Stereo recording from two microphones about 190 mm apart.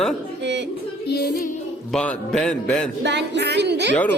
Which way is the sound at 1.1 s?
55° left (ahead or behind).